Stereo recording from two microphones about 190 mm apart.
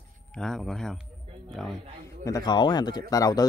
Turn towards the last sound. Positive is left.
turn(degrees=20)  # may be behind; listen again after turning